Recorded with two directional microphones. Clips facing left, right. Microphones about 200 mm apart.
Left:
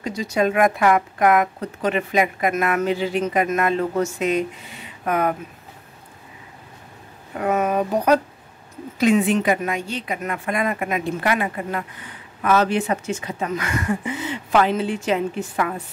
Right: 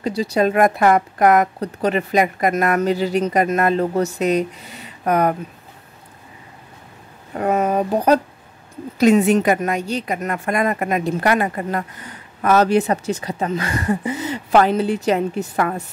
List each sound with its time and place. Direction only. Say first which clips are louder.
0.0 s a woman's voice: right 3 dB; 35° right (ahead or behind)
7.3 s a woman's voice: right 2 dB; 35° right (ahead or behind)